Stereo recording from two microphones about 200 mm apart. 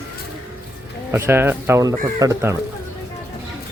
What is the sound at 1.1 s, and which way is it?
Speech, 10° right (ahead or behind).